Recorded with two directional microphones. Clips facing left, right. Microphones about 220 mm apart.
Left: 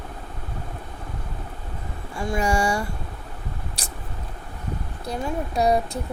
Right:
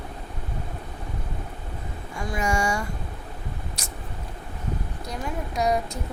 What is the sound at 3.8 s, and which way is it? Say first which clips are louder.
Vehicle: left 1 dB; 35° left (ahead or behind).